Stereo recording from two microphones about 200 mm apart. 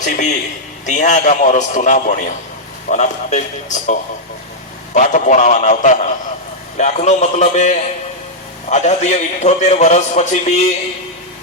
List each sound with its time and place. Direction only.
0.0 s a man's voice: 40° left (ahead or behind)
4.9 s a man's voice: 40° left (ahead or behind)